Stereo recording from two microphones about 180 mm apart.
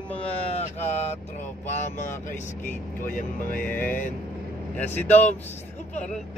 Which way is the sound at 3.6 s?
10° left (ahead or behind).